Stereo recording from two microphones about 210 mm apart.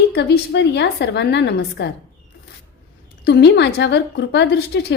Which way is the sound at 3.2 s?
55° left (ahead or behind).